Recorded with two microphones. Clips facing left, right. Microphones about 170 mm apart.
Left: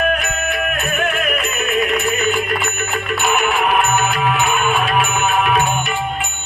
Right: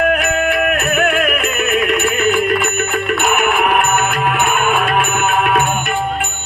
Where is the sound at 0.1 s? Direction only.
55° right (ahead or behind).